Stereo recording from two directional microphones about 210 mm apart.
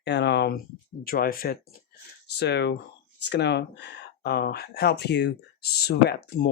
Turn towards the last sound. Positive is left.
turn(degrees=50)  # may be behind; listen again after turning